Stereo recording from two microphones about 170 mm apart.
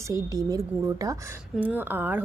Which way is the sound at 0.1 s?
20° right (ahead or behind).